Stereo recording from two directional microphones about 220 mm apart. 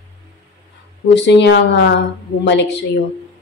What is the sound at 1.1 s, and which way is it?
Speech, 50° left (ahead or behind).